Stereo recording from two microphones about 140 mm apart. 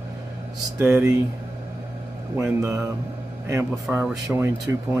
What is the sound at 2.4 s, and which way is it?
Mantra, 20° right (ahead or behind).